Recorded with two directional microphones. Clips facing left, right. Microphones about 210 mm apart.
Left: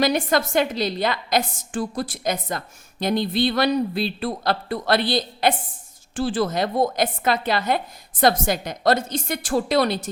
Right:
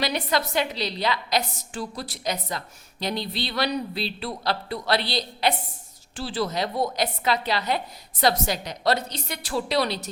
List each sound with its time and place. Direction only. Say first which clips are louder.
0.0 s a woman's voice: left 5 dB; 50° left (ahead or behind)